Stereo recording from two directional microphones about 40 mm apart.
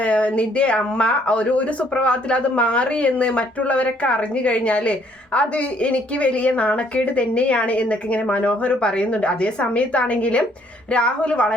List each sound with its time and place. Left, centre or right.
0.0 s a woman's voice: left